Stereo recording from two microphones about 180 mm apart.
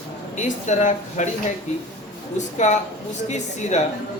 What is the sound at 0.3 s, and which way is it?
Speech, 40° left (ahead or behind).